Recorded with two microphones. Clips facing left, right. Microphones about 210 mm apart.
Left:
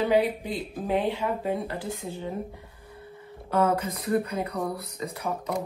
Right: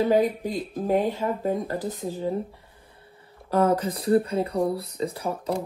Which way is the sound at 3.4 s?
35° right (ahead or behind).